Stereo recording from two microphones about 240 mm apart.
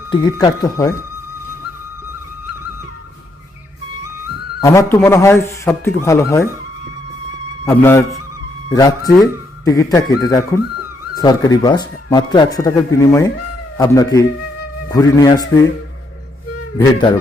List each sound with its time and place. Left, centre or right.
0.1 s a man's voice: centre
4.6 s a man's voice: centre
7.6 s a man's voice: centre
16.7 s speech: centre